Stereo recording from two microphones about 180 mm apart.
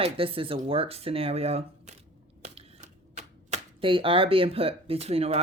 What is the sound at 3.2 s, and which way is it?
Speech, 35° right (ahead or behind).